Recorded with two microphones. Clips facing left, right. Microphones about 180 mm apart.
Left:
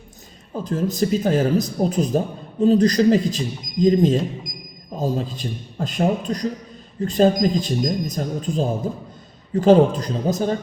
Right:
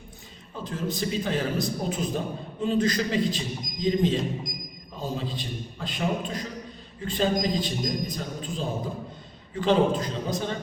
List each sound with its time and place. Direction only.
0.5 s a man's voice: 40° left (ahead or behind)